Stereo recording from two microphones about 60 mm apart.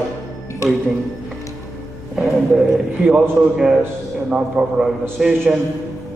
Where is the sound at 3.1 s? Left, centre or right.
Centre.